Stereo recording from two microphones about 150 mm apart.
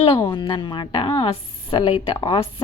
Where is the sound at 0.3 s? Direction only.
30° left (ahead or behind).